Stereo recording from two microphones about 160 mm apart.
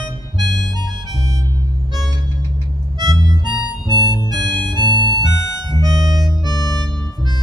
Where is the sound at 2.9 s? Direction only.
25° right (ahead or behind).